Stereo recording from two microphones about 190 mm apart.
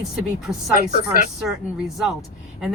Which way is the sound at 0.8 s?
40° left (ahead or behind).